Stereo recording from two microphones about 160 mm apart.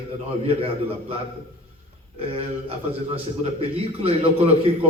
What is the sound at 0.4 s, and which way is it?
A man's voice, 40° right (ahead or behind).